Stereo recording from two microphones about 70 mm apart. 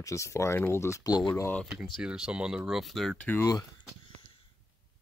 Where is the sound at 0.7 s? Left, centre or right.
Left.